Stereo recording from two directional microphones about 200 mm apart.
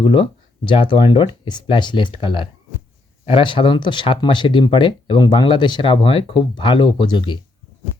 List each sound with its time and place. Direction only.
0.0 s speech: 25° left (ahead or behind)